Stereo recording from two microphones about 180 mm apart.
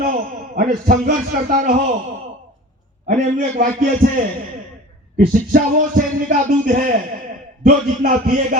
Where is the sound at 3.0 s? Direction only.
45° right (ahead or behind).